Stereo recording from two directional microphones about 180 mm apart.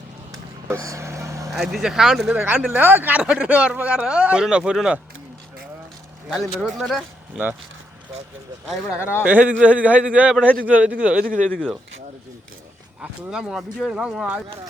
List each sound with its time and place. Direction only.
0.3 s vehicle: 15° right (ahead or behind)
1.5 s speech: centre (ahead or behind)
6.6 s speech: centre (ahead or behind)
8.6 s a man's voice: 5° right (ahead or behind)
13.0 s speech: 5° right (ahead or behind)